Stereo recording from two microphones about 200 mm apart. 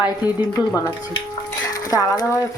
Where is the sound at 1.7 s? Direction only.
20° left (ahead or behind).